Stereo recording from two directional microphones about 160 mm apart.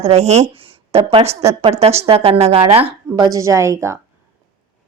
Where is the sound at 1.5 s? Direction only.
40° right (ahead or behind).